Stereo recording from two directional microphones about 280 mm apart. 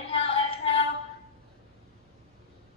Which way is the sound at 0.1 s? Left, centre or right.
Centre.